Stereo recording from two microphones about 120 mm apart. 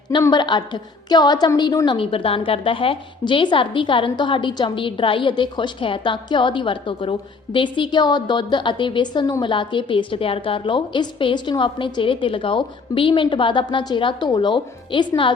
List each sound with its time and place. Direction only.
0.2 s a woman's voice: 35° left (ahead or behind)
2.0 s a woman's voice: 50° left (ahead or behind)